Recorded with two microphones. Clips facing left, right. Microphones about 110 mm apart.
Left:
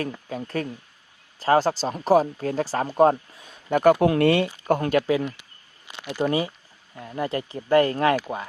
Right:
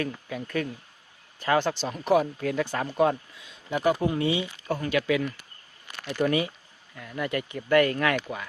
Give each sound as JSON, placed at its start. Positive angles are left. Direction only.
{"t": 0.0, "sound": "speech", "side_deg": 35}
{"t": 4.0, "sound": "speech", "side_deg": 70}
{"t": 4.9, "sound": "speech", "side_deg": 40}